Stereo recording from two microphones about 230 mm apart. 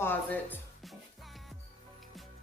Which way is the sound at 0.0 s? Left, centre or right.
Centre.